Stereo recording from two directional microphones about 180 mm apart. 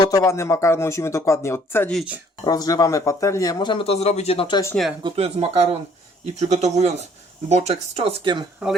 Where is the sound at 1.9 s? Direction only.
5° right (ahead or behind).